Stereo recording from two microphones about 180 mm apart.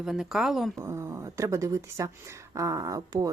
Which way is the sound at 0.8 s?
15° right (ahead or behind).